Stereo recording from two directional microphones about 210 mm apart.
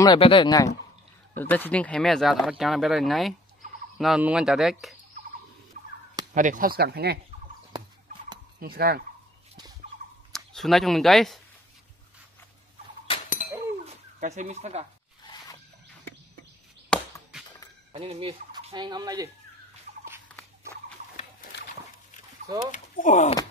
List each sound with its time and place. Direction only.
0.0 s speech: 20° left (ahead or behind)
1.3 s speech: 10° left (ahead or behind)
5.7 s fowl: 35° right (ahead or behind)
6.3 s speech: 40° right (ahead or behind)
8.5 s speech: 45° right (ahead or behind)
10.3 s speech: centre (ahead or behind)
13.1 s chink: 25° left (ahead or behind)
14.2 s speech: 35° right (ahead or behind)
16.9 s chop: 5° left (ahead or behind)
17.9 s fowl: 25° right (ahead or behind)
22.7 s speech: 35° left (ahead or behind)